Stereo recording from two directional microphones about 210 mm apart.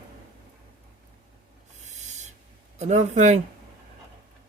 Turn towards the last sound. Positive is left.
turn(degrees=-35)  # may be behind; listen again after turning